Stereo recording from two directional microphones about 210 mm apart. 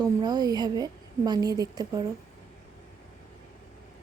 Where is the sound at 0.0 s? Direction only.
20° right (ahead or behind).